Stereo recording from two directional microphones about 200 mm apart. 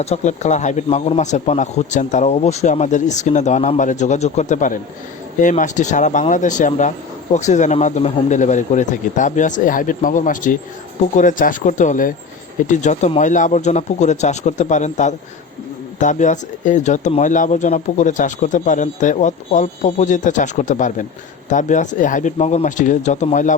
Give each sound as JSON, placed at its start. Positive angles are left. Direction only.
{"t": 0.0, "sound": "speech", "side_deg": 35}